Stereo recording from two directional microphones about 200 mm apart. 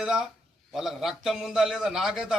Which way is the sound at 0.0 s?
5° right (ahead or behind).